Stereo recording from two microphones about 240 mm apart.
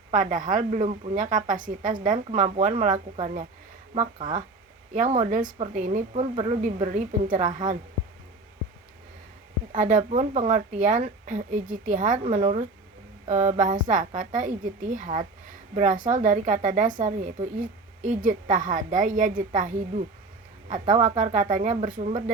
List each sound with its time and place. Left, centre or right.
0.1 s a woman's voice: right
4.9 s a woman's voice: right
9.7 s a woman's voice: right